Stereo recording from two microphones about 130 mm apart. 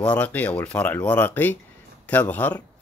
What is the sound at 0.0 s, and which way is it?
Speech, 10° left (ahead or behind).